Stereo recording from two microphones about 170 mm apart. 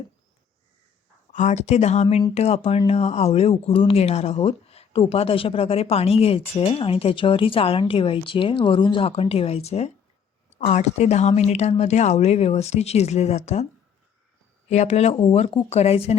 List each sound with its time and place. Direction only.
1.3 s speech: 45° left (ahead or behind)
14.7 s speech: 40° left (ahead or behind)